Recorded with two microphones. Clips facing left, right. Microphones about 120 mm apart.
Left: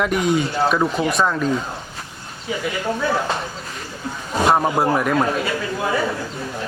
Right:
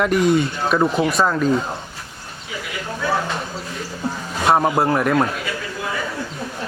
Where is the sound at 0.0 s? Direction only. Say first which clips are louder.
Right 2 dB; centre (ahead or behind).